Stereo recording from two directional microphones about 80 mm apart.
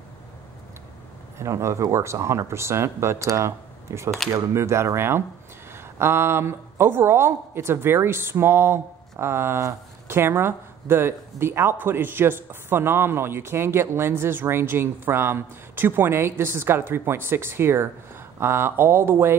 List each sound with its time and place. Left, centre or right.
1.4 s speech: right